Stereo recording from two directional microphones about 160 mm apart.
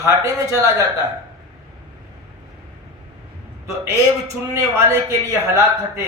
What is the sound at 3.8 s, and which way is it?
A man's voice, 15° right (ahead or behind).